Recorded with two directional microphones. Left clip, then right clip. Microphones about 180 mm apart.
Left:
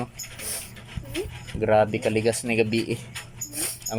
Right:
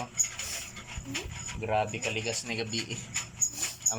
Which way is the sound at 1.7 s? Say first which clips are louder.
Left 9 dB; 35° left (ahead or behind).